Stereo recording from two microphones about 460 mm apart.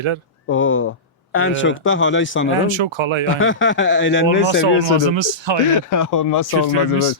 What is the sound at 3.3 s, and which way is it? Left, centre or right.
Speech, left.